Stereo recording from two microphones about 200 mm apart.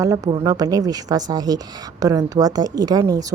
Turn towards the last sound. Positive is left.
turn(degrees=-20)  # may be behind; listen again after turning